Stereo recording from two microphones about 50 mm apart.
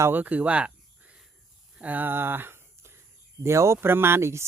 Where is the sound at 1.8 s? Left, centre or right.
Right.